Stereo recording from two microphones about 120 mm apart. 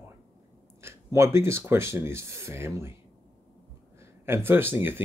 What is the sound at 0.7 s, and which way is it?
Speech, 25° right (ahead or behind).